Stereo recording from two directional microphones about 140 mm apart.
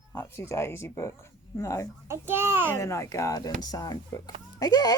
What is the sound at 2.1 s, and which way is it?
Speech, 15° right (ahead or behind).